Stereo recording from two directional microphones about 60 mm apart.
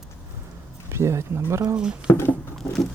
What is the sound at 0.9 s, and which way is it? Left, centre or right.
Speech, right.